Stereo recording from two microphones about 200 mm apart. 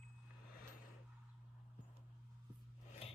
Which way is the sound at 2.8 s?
35° left (ahead or behind).